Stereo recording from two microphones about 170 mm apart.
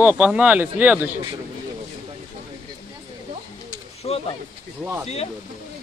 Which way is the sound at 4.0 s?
35° left (ahead or behind).